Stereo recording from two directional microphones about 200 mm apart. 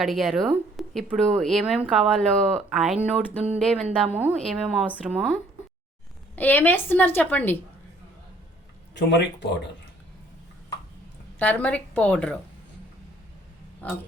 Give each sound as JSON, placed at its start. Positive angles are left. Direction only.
{"t": 0.0, "sound": "speech", "side_deg": 0}
{"t": 4.0, "sound": "a woman's voice", "side_deg": -5}
{"t": 6.3, "sound": "a woman's voice", "side_deg": 10}
{"t": 9.0, "sound": "speech", "side_deg": 60}
{"t": 11.3, "sound": "a woman's voice", "side_deg": 5}
{"t": 13.8, "sound": "a woman's voice", "side_deg": 10}